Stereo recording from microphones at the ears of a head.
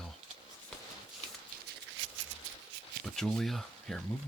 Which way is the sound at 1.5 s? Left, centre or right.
Right.